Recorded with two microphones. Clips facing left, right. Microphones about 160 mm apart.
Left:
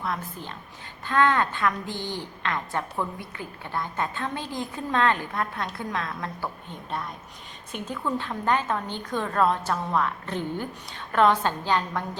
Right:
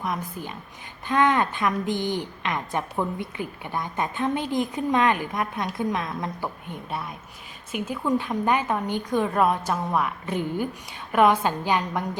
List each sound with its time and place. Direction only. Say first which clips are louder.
0.0 s a woman's voice: right 2 dB; 15° right (ahead or behind)